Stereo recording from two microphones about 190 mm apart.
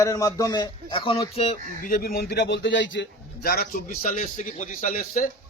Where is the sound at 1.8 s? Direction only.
50° left (ahead or behind).